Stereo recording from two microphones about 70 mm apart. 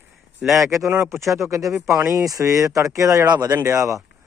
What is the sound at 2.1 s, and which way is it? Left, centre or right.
Speech, right.